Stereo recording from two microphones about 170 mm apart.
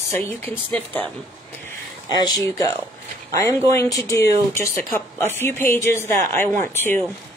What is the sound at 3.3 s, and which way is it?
Speech, 15° left (ahead or behind).